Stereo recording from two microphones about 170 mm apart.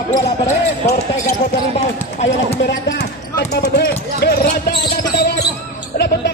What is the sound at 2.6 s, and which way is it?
Speech, 85° left.